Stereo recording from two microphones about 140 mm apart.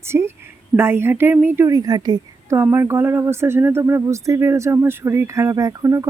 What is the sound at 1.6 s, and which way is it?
Speech, 25° right (ahead or behind).